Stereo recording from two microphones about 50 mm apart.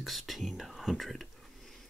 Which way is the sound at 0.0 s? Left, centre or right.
Centre.